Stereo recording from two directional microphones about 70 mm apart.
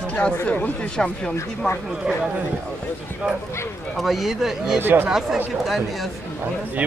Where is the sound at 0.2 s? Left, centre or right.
Centre.